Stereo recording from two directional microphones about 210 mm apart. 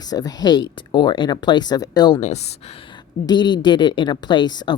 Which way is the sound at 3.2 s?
20° left (ahead or behind).